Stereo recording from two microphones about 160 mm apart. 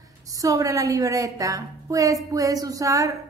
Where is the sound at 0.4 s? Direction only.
20° right (ahead or behind).